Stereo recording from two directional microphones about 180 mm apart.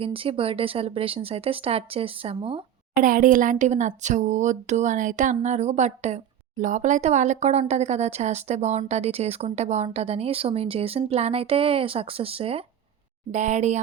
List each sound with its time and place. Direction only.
0.0 s speech: 30° right (ahead or behind)
2.9 s speech: 50° right (ahead or behind)